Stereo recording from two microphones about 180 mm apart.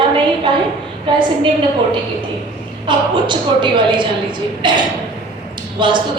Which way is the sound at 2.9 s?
25° right (ahead or behind).